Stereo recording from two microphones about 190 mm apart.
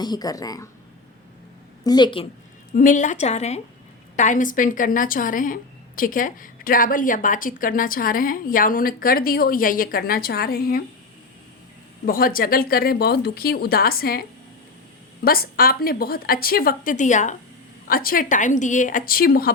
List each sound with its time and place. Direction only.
0.0 s speech: 20° left (ahead or behind)
1.8 s speech: 20° left (ahead or behind)
2.7 s a woman's voice: 45° left (ahead or behind)
12.0 s a woman's voice: 50° left (ahead or behind)